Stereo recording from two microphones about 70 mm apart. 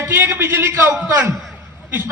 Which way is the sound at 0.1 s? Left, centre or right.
Right.